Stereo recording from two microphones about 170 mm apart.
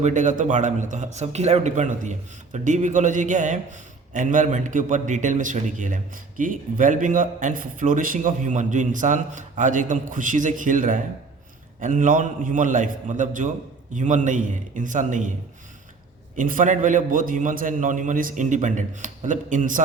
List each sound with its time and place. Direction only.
0.0 s a man's voice: 45° right (ahead or behind)